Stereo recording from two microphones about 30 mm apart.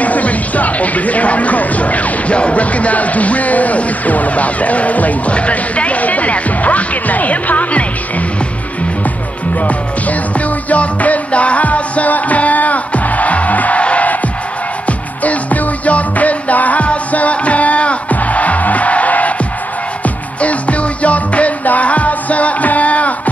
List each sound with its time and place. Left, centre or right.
0.0 s music: left
5.3 s speech: left
9.6 s music: left
13.7 s music: left
14.9 s music: left
16.8 s music: left
20.3 s music: left